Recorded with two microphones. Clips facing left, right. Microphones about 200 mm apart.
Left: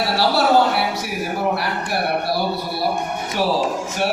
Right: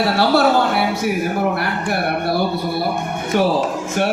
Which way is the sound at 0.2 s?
55° right (ahead or behind).